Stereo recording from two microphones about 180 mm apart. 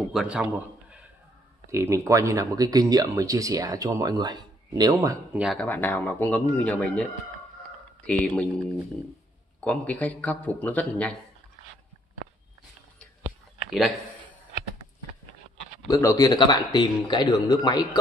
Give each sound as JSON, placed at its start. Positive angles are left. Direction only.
{"t": 0.0, "sound": "a man's voice", "side_deg": 0}
{"t": 5.3, "sound": "speech", "side_deg": 0}
{"t": 8.1, "sound": "speech", "side_deg": 5}
{"t": 9.7, "sound": "speech", "side_deg": 10}
{"t": 13.2, "sound": "a sound", "side_deg": 0}
{"t": 15.9, "sound": "speech", "side_deg": 15}